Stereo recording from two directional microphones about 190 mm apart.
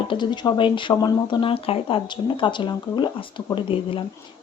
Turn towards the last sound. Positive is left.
turn(degrees=30)  # may be behind; listen again after turning